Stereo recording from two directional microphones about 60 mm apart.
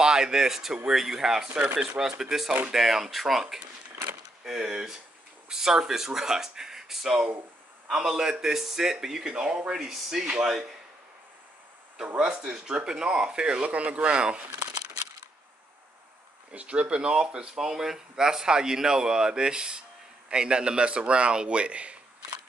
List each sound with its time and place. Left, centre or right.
0.0 s speech: centre
12.2 s speech: centre
16.5 s speech: right